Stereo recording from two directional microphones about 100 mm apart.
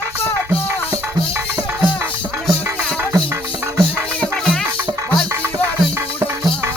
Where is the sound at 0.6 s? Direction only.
35° right (ahead or behind).